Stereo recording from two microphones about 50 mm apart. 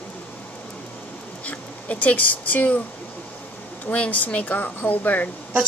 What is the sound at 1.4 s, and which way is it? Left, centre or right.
Speech, left.